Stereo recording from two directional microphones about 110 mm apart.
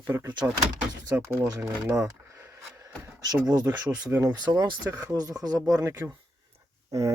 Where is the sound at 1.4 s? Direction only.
35° right (ahead or behind).